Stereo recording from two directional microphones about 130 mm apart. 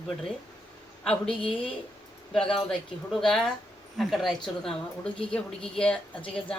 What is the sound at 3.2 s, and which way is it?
Speech, 5° left (ahead or behind).